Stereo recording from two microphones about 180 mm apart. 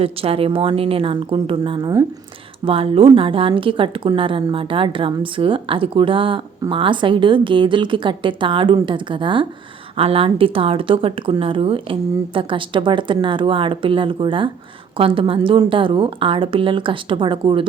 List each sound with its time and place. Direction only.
0.0 s a woman's voice: 30° right (ahead or behind)